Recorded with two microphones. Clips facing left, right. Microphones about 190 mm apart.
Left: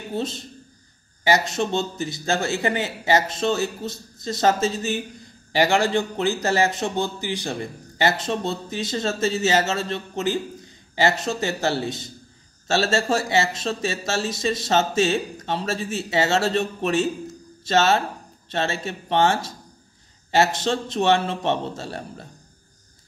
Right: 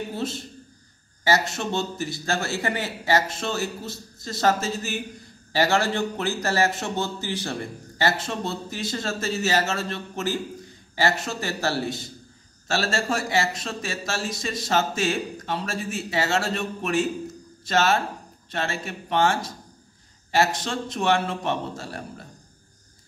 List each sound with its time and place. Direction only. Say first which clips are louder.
0.1 s a man's voice: left 2 dB; 20° left (ahead or behind)